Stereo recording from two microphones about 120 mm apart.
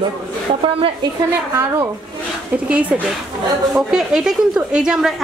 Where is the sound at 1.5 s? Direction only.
25° right (ahead or behind).